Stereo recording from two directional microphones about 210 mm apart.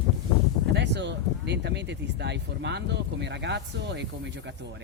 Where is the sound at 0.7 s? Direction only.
55° right (ahead or behind).